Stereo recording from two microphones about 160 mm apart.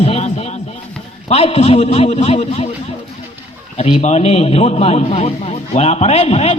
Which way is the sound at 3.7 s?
40° left (ahead or behind).